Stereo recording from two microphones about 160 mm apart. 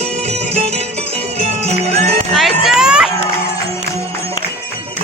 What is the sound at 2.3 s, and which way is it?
Music, centre (ahead or behind).